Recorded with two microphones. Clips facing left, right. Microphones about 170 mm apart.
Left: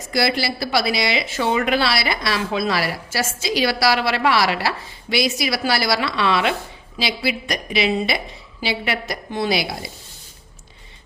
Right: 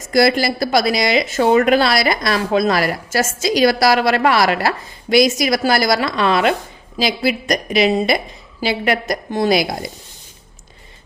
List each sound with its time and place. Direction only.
0.1 s a woman's voice: 45° right (ahead or behind)